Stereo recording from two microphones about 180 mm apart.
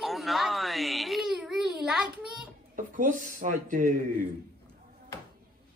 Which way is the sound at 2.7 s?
45° right (ahead or behind).